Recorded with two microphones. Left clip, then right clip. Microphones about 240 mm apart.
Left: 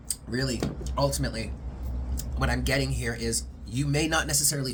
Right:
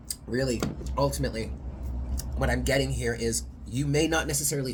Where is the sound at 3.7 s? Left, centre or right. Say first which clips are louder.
Right 1 dB; centre.